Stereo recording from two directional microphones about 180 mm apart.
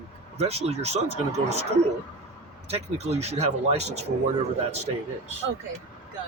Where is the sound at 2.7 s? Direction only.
35° right (ahead or behind).